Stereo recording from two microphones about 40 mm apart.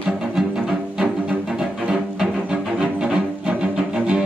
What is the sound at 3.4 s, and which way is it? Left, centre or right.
Music, right.